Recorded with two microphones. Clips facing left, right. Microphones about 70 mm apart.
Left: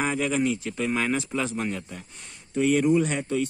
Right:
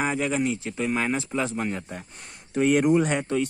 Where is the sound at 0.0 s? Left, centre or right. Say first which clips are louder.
Even; centre.